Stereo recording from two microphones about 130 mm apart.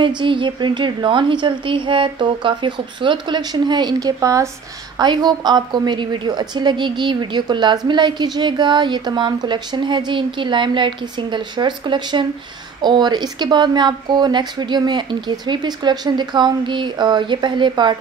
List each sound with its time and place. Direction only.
0.2 s a woman's voice: 40° right (ahead or behind)